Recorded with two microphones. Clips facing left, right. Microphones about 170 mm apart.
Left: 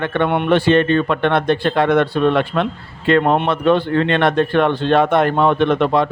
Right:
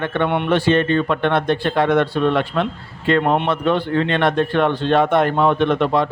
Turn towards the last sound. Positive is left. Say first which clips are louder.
# left 2 dB
turn(degrees=65)  # may be behind; listen again after turning